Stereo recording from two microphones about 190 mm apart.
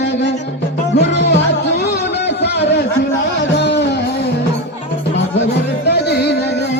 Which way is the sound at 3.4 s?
65° left (ahead or behind).